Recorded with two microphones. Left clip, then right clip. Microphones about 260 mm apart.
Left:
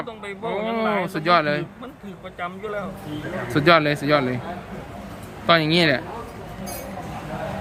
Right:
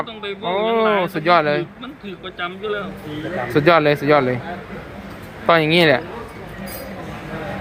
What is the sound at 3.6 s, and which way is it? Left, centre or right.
Speech, centre.